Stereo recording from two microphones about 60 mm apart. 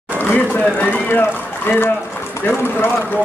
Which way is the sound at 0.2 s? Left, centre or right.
Left.